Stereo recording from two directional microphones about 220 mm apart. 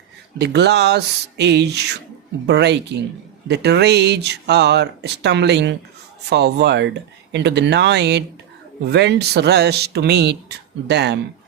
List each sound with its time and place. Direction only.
0.3 s speech: 50° right (ahead or behind)